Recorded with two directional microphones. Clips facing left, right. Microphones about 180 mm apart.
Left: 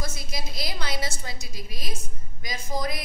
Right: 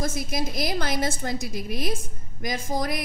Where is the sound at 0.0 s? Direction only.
50° right (ahead or behind).